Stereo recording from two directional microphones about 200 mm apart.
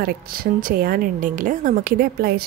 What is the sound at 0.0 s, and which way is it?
A woman's voice, 50° right (ahead or behind).